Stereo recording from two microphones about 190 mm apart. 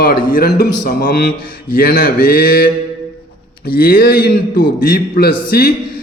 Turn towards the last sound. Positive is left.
turn(degrees=55)  # may be behind; listen again after turning